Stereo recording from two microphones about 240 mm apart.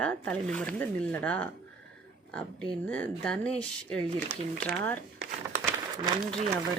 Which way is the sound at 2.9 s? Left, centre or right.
Centre.